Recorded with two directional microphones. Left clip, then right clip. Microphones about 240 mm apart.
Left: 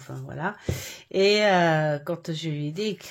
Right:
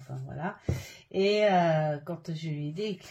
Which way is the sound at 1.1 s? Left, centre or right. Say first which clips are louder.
Left 4 dB; left.